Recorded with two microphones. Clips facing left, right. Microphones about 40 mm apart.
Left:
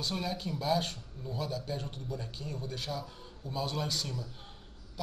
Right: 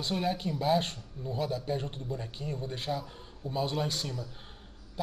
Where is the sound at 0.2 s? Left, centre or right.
Right.